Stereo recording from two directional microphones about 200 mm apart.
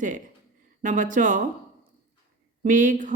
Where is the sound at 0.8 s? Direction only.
40° right (ahead or behind).